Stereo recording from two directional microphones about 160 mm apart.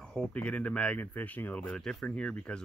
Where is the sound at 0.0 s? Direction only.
5° left (ahead or behind).